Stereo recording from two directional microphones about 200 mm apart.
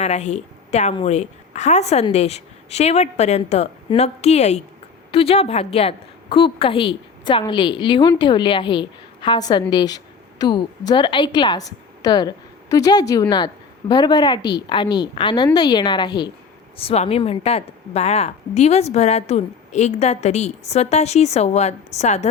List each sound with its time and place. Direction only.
0.0 s a woman's voice: 35° left (ahead or behind)